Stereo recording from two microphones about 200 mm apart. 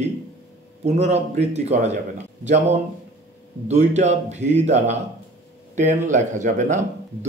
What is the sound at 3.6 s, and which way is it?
A man's voice, 35° right (ahead or behind).